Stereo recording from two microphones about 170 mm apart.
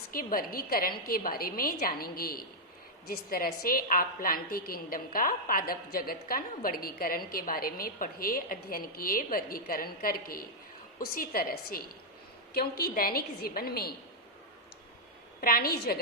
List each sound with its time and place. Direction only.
0.1 s a woman's voice: 55° left (ahead or behind)
15.4 s a woman's voice: 60° left (ahead or behind)